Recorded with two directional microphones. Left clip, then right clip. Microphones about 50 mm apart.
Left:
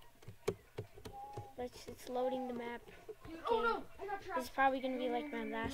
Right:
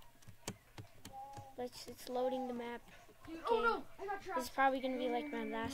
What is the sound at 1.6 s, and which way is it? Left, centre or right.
Speech, centre.